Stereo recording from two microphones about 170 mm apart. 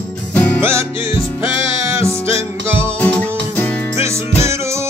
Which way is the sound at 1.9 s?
15° right (ahead or behind).